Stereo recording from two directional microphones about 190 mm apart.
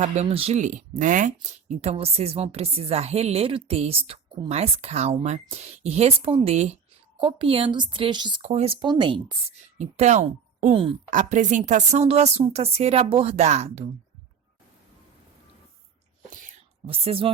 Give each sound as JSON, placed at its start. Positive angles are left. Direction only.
{"t": 0.0, "sound": "speech", "side_deg": -35}
{"t": 9.7, "sound": "speech", "side_deg": -40}
{"t": 16.8, "sound": "speech", "side_deg": -30}